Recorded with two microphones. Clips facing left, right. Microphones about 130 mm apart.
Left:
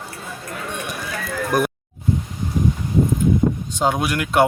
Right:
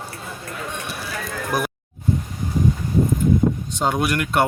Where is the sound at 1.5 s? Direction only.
Centre (ahead or behind).